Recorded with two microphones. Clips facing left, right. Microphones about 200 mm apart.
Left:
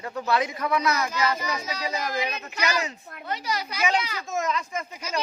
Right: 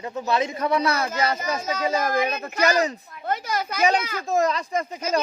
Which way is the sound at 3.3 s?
50° right (ahead or behind).